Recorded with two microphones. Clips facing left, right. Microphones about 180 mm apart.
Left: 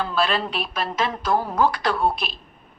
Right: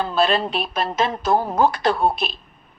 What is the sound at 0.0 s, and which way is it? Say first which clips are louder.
A woman's voice: right 3 dB; 25° right (ahead or behind).